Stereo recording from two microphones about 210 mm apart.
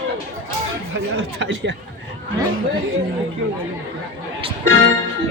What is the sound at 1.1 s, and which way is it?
Speech, 55° right (ahead or behind).